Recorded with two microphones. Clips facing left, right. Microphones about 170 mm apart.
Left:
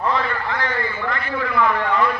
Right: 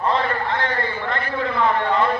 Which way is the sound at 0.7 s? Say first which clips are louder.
Even; 30° right (ahead or behind).